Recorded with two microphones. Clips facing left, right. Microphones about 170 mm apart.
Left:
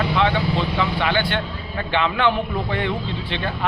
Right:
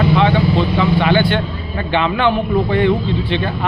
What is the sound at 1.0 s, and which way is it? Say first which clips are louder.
A man's voice: right 7 dB; 15° right (ahead or behind).